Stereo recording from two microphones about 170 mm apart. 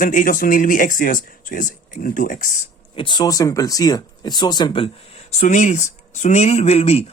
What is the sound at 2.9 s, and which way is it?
Speech, 25° left (ahead or behind).